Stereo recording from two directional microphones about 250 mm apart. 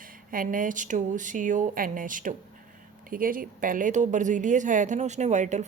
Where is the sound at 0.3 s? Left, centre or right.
Right.